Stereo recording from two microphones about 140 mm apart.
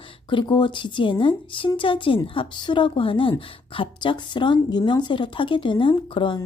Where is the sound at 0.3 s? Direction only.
35° left (ahead or behind).